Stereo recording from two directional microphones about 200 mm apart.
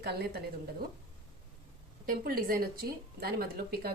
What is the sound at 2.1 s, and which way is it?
A woman's voice, 45° right (ahead or behind).